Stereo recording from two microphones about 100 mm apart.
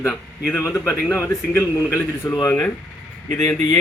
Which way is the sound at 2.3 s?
40° left (ahead or behind).